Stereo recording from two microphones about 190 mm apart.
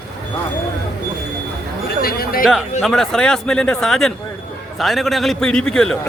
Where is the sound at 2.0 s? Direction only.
50° left (ahead or behind).